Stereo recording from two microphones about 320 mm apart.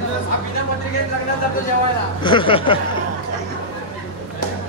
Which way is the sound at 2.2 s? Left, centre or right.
Centre.